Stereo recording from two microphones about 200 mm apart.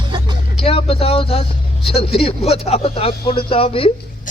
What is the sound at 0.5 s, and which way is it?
Speech, 30° left (ahead or behind).